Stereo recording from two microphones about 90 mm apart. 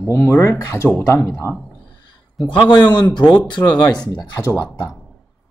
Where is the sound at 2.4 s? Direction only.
55° left (ahead or behind).